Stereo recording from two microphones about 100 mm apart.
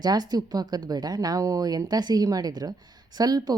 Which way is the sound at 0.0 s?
40° right (ahead or behind).